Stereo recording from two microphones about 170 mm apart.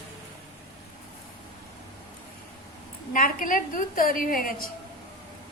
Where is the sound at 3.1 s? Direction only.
55° left (ahead or behind).